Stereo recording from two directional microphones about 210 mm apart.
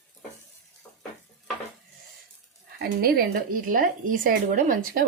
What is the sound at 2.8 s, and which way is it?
Speech, 45° right (ahead or behind).